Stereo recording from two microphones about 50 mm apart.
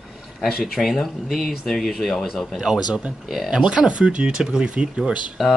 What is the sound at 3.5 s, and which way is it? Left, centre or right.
Speech, centre.